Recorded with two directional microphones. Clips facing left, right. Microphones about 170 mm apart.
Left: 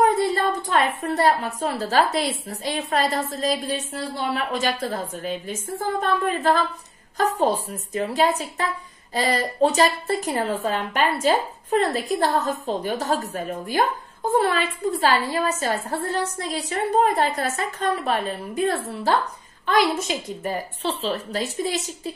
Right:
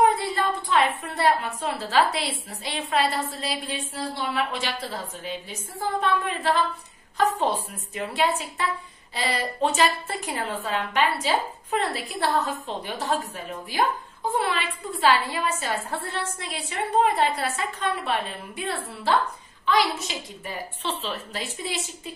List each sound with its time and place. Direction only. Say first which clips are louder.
0.0 s a woman's voice: left 2 dB; 45° left (ahead or behind)